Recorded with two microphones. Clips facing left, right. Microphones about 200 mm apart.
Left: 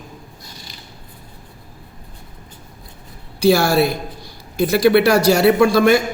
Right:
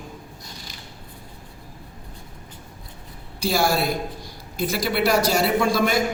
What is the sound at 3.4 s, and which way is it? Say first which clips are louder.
A man's voice: left 8 dB; 70° left (ahead or behind).